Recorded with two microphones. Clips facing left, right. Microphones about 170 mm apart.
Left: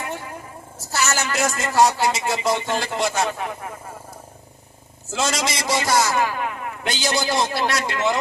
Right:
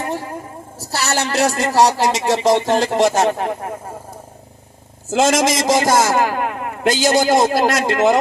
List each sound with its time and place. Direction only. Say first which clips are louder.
0.0 s a sound: right 7 dB; 35° right (ahead or behind)
0.8 s a woman's voice: right 3 dB; 35° right (ahead or behind)
5.1 s a man's voice: right 9 dB; 50° right (ahead or behind)